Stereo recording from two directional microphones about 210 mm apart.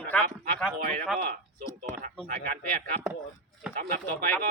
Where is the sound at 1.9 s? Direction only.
40° right (ahead or behind).